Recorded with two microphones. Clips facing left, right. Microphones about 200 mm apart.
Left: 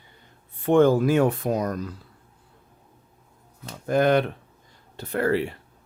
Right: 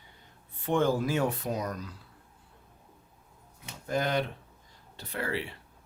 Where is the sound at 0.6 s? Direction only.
60° left (ahead or behind).